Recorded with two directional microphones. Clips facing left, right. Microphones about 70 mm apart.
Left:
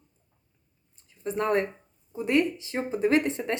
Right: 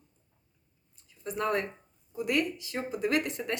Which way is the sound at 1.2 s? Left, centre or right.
Left.